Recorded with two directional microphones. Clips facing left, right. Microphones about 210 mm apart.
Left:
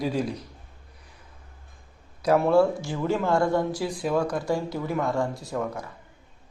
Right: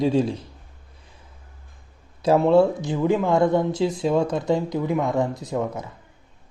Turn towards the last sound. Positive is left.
turn(degrees=-20)  # may be behind; listen again after turning